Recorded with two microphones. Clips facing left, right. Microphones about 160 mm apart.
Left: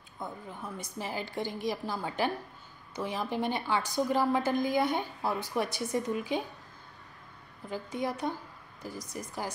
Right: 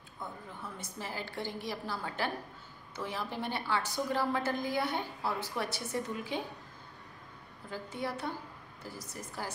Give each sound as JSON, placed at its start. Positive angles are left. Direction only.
{"t": 0.2, "sound": "a woman's voice", "side_deg": 15}
{"t": 7.7, "sound": "a woman's voice", "side_deg": 15}